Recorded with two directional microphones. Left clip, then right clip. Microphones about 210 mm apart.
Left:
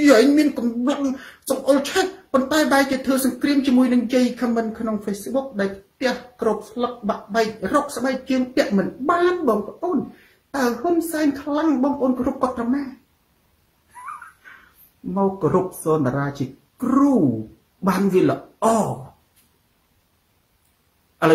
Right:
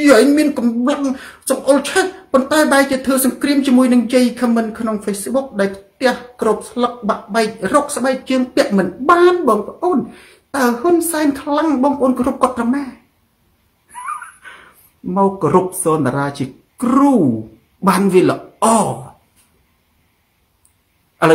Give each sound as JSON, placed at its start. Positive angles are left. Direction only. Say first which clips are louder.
{"t": 0.0, "sound": "speech", "louder": "right 4 dB", "side_deg": -10}
{"t": 15.1, "sound": "speech", "louder": "right 6 dB", "side_deg": -10}